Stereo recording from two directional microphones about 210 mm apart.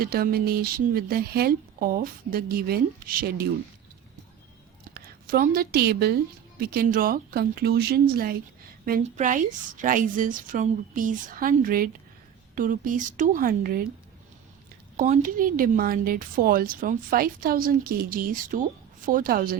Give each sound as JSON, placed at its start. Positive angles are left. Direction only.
{"t": 0.0, "sound": "speech", "side_deg": -45}
{"t": 4.9, "sound": "a woman's voice", "side_deg": -45}
{"t": 14.9, "sound": "a woman's voice", "side_deg": -35}